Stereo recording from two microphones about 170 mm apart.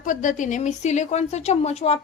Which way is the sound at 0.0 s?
50° left (ahead or behind).